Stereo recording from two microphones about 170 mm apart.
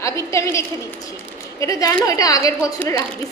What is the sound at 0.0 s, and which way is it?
Speech, 15° left (ahead or behind).